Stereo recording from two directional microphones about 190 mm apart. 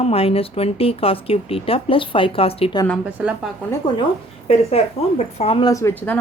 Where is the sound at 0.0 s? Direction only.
30° left (ahead or behind).